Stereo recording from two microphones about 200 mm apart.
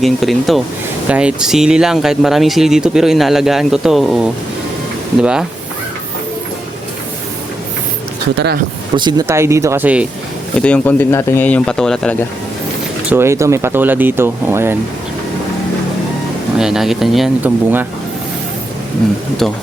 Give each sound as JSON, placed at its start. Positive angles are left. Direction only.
{"t": 0.0, "sound": "speech", "side_deg": 0}
{"t": 8.4, "sound": "speech", "side_deg": -55}
{"t": 9.0, "sound": "speech", "side_deg": -20}
{"t": 10.6, "sound": "speech", "side_deg": 5}
{"t": 13.1, "sound": "speech", "side_deg": -10}
{"t": 16.6, "sound": "speech", "side_deg": -5}